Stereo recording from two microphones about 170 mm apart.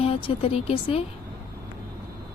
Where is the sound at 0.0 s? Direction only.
30° left (ahead or behind).